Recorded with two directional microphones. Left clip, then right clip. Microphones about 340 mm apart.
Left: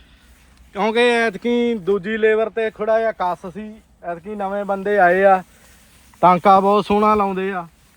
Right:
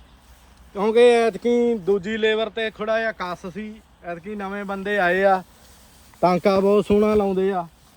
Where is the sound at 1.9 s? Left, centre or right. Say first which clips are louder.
Left 3 dB; centre.